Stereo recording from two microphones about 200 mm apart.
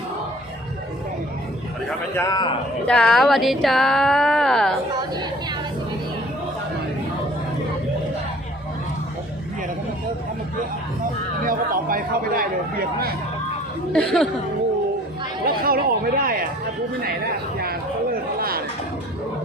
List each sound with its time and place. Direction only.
2.1 s a man's voice: 20° left (ahead or behind)
2.8 s speech: 5° left (ahead or behind)
4.9 s chatter: 20° right (ahead or behind)
11.4 s a sound: 45° right (ahead or behind)
13.9 s speech: centre (ahead or behind)
15.4 s a sound: 45° right (ahead or behind)
17.6 s chatter: 50° right (ahead or behind)